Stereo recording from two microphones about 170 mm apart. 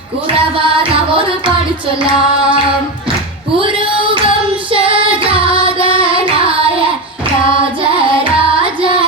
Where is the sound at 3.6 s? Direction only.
30° right (ahead or behind).